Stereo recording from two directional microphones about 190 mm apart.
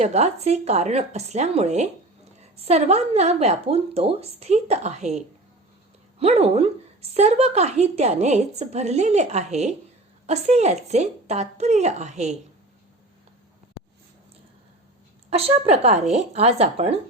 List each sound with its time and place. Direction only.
0.0 s a woman's voice: 35° right (ahead or behind)
15.3 s a woman's voice: 30° right (ahead or behind)